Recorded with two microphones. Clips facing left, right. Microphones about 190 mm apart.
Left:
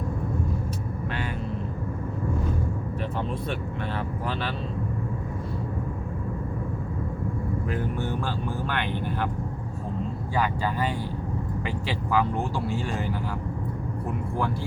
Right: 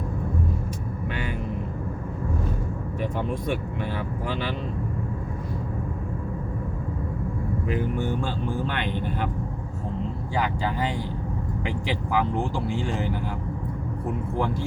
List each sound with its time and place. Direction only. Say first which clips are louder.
7.7 s speech: right 5 dB; 15° right (ahead or behind)
10.3 s speech: even; 20° right (ahead or behind)
11.9 s speech: even; 15° right (ahead or behind)